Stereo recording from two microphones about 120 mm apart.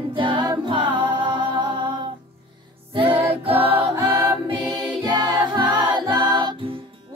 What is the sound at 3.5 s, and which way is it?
Music, 15° right (ahead or behind).